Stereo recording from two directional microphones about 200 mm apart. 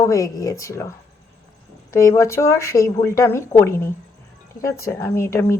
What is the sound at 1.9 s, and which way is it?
A woman's voice, 15° left (ahead or behind).